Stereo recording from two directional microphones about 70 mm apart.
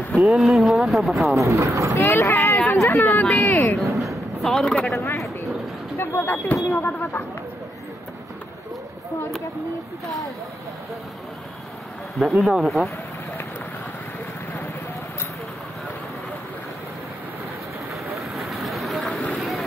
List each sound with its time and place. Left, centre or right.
0.3 s speech: centre
1.2 s speech: right
2.0 s speech: left
2.7 s speech: left
4.0 s a sound: centre
4.7 s speech: centre
5.0 s a sound: left
5.9 s speech: left
6.5 s speech: left
12.2 s speech: centre
18.3 s a sound: centre
19.3 s vehicle: centre